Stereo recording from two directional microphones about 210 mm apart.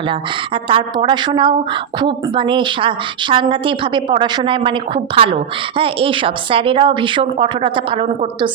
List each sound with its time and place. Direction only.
0.1 s a woman's voice: 25° right (ahead or behind)